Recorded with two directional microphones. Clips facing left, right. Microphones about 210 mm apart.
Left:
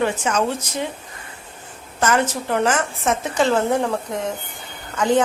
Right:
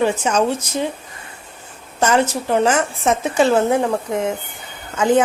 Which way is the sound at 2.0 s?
10° right (ahead or behind).